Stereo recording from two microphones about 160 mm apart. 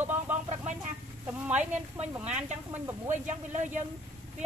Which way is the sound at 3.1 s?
50° right (ahead or behind).